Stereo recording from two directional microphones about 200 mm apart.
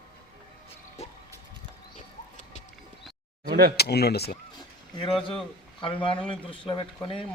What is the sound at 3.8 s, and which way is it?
Speech, 55° left (ahead or behind).